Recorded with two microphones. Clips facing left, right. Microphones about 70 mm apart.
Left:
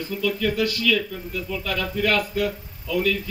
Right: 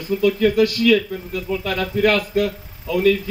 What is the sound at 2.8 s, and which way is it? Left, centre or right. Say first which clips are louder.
Speech: right 6 dB; right.